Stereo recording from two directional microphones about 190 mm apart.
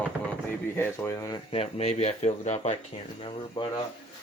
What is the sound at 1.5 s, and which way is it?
Speech, 30° left (ahead or behind).